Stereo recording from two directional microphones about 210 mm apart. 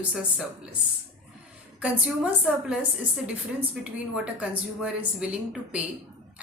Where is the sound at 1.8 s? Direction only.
5° right (ahead or behind).